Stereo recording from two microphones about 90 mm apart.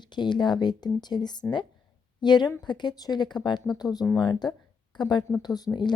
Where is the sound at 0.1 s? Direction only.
55° left (ahead or behind).